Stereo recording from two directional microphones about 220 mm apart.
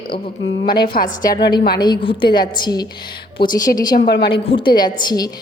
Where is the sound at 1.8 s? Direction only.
20° left (ahead or behind).